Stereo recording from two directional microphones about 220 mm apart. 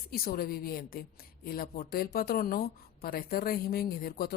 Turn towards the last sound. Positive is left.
turn(degrees=45)  # may be behind; listen again after turning